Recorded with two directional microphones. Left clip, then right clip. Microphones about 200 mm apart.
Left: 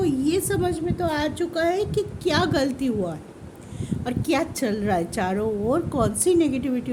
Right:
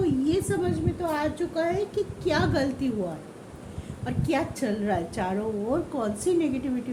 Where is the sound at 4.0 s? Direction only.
50° left (ahead or behind).